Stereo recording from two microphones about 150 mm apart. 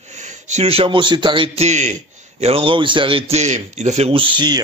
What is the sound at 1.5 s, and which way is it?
Speech, 50° right (ahead or behind).